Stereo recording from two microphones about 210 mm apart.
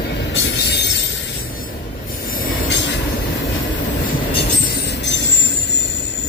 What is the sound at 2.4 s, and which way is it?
Train, 55° left (ahead or behind).